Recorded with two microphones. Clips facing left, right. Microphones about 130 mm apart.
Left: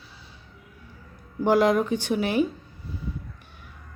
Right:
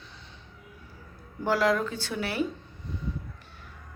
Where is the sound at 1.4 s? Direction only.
20° left (ahead or behind).